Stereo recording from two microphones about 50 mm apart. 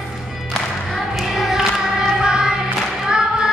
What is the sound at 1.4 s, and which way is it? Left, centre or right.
Choir, centre.